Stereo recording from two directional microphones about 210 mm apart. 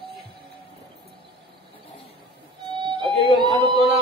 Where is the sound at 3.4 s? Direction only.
20° right (ahead or behind).